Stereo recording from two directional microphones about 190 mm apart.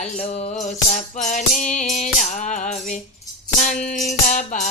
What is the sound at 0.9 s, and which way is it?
Music, 40° left (ahead or behind).